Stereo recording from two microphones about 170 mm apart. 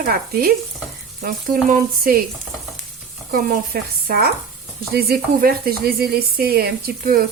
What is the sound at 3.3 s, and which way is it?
Speech, 60° right (ahead or behind).